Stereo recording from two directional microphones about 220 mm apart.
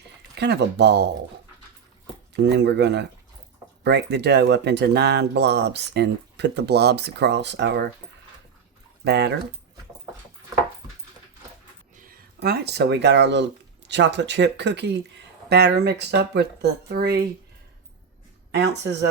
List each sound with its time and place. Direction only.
0.3 s speech: 50° right (ahead or behind)
2.3 s speech: 50° right (ahead or behind)
9.0 s speech: 50° right (ahead or behind)
11.9 s speech: 40° right (ahead or behind)